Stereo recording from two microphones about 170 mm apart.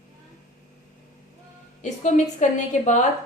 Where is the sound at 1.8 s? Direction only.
45° left (ahead or behind).